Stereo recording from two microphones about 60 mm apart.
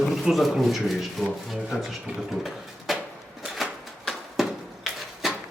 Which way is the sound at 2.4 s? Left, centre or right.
Centre.